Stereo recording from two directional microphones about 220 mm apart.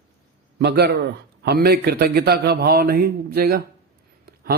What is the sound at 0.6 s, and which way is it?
A man's voice, 50° right (ahead or behind).